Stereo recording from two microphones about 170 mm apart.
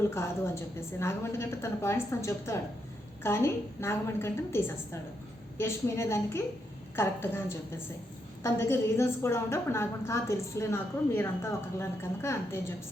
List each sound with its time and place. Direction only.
0.1 s a woman's voice: 15° left (ahead or behind)
8.4 s a woman's voice: 15° left (ahead or behind)